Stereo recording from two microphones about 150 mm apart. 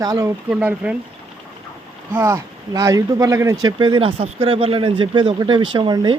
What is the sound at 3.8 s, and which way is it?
Speech, 35° right (ahead or behind).